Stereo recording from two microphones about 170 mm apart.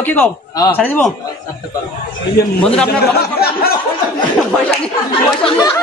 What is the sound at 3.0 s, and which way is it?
Speech, 65° left (ahead or behind).